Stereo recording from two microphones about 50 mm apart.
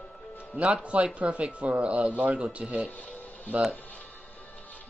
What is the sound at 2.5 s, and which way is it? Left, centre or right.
Speech, centre.